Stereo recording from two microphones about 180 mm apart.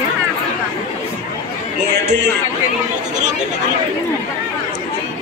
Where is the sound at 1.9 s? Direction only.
70° right (ahead or behind).